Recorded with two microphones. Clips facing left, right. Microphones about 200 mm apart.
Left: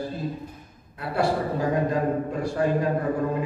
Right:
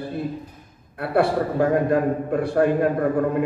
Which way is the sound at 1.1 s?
60° right (ahead or behind).